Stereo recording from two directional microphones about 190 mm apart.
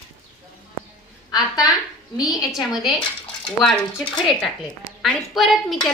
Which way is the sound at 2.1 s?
20° left (ahead or behind).